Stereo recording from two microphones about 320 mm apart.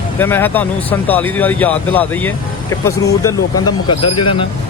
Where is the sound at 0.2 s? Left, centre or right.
Centre.